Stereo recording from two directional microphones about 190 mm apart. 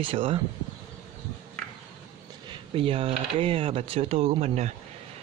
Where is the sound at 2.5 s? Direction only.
30° right (ahead or behind).